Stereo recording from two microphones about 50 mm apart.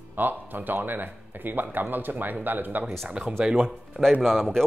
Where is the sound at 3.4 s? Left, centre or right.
Centre.